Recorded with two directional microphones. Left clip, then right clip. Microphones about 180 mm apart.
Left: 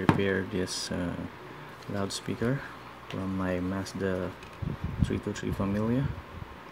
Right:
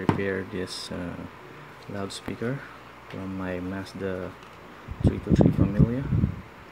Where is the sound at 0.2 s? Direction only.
10° left (ahead or behind).